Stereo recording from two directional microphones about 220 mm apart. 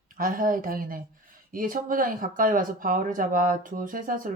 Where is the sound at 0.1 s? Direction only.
40° right (ahead or behind).